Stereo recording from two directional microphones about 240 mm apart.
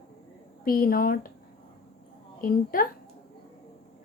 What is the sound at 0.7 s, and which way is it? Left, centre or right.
Speech, left.